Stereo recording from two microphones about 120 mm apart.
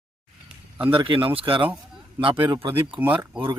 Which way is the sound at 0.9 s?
45° right (ahead or behind).